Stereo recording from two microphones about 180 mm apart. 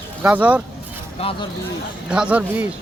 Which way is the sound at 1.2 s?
30° left (ahead or behind).